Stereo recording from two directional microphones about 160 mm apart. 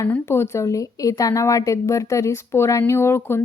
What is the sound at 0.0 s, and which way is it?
A woman's voice, 15° left (ahead or behind).